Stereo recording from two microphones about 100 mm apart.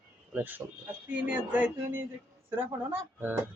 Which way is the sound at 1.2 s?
20° right (ahead or behind).